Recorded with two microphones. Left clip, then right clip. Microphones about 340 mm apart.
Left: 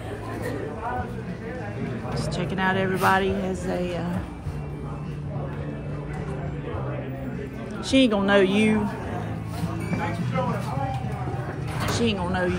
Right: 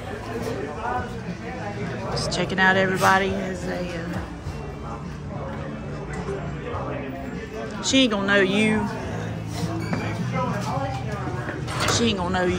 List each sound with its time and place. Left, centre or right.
2.2 s a woman's voice: centre
7.8 s speech: centre
12.0 s a woman's voice: centre